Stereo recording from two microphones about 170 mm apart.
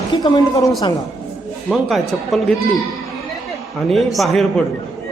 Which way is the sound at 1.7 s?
Centre (ahead or behind).